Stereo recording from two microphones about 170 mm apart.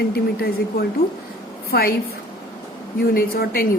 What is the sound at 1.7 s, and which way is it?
Speech, 65° left (ahead or behind).